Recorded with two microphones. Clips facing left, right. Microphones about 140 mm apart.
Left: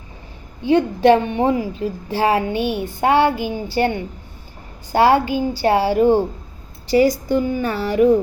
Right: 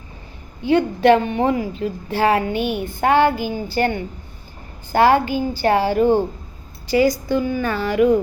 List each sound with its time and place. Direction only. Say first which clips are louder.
0.7 s a woman's voice: left 1 dB; 20° left (ahead or behind)